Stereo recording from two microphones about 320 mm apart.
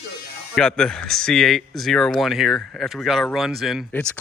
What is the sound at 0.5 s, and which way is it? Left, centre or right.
Speech, centre.